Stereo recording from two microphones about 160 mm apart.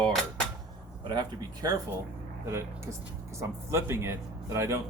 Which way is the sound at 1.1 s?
25° right (ahead or behind).